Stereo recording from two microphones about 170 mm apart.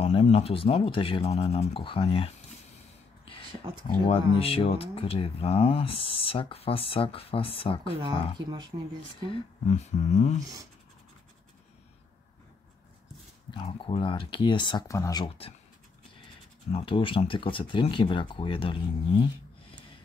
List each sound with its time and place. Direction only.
0.0 s speech: 40° left (ahead or behind)
3.8 s speech: 35° left (ahead or behind)
8.0 s speech: 25° right (ahead or behind)
9.7 s a sound: 40° left (ahead or behind)
13.5 s speech: 30° left (ahead or behind)
16.7 s speech: 30° left (ahead or behind)